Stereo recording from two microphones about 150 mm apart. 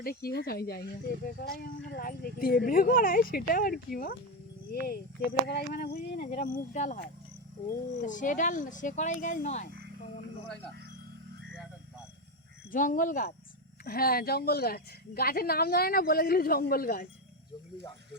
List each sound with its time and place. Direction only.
0.0 s speech: 85° left
4.7 s speech: 90° left
6.0 s speech: 55° left (ahead or behind)
8.0 s speech: 60° left (ahead or behind)
12.7 s speech: 65° left (ahead or behind)
13.8 s a woman's voice: 85° left